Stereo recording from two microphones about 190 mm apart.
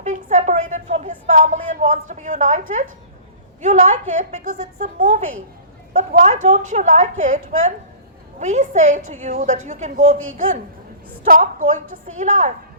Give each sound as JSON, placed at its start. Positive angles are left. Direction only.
{"t": 0.0, "sound": "a woman's voice", "side_deg": -40}
{"t": 11.3, "sound": "a woman's voice", "side_deg": -45}